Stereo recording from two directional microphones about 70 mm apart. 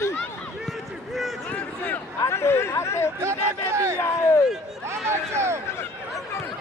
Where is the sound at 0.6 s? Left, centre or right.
Centre.